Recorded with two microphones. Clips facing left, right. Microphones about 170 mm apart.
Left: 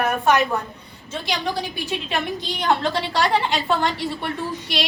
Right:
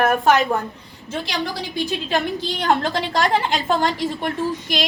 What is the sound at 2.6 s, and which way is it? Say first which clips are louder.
A woman's voice: right 1 dB; 50° right (ahead or behind).